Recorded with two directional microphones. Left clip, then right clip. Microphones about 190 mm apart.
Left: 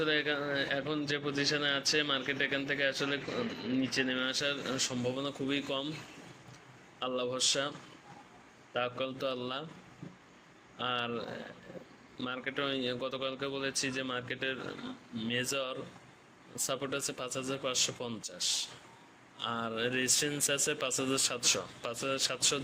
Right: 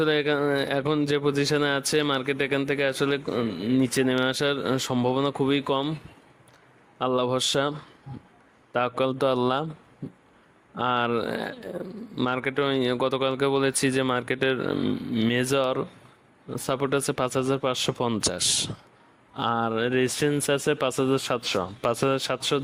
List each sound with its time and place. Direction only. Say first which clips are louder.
0.0 s speech: right 8 dB; 60° right (ahead or behind)
7.0 s speech: right 9 dB; 55° right (ahead or behind)
8.7 s speech: right 10 dB; 55° right (ahead or behind)
10.8 s speech: right 10 dB; 55° right (ahead or behind)